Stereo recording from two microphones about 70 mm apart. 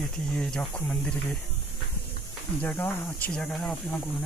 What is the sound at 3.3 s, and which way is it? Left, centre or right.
Speech, centre.